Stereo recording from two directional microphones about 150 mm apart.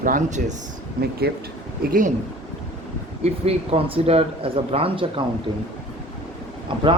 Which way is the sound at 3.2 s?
40° right (ahead or behind).